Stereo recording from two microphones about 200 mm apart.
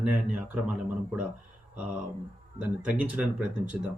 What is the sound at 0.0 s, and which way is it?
Speech, 5° right (ahead or behind).